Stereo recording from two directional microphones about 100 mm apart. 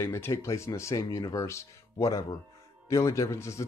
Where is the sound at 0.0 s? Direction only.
25° left (ahead or behind).